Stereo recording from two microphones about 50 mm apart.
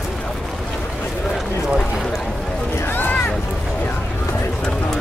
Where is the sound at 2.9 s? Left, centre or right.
Left.